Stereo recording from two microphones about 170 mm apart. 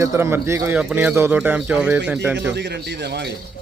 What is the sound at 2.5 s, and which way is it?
Speech, 85° right.